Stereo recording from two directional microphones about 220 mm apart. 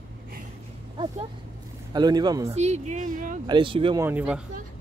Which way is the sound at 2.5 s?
30° right (ahead or behind).